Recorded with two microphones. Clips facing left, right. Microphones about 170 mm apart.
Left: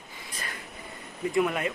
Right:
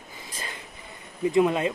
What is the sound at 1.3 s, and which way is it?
Speech, 25° right (ahead or behind).